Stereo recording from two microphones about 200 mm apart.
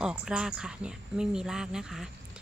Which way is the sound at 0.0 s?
5° right (ahead or behind).